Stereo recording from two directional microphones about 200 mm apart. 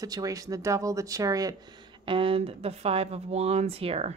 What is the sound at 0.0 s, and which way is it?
Speech, 15° right (ahead or behind).